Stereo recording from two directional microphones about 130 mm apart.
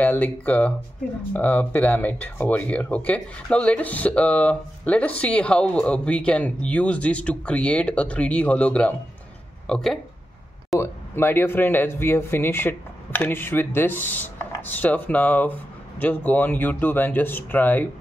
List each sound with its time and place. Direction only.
0.0 s speech: 15° left (ahead or behind)
10.8 s speech: 20° left (ahead or behind)